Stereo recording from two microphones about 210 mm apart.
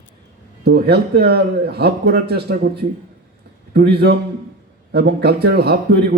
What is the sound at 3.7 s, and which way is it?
A man's voice, 50° right (ahead or behind).